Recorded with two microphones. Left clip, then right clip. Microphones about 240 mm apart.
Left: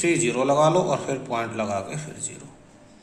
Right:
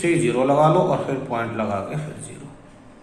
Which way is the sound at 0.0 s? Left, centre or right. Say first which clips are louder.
Right 2 dB; left.